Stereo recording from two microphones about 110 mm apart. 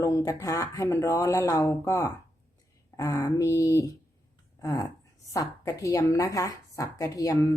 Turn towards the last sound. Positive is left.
turn(degrees=30)  # may be behind; listen again after turning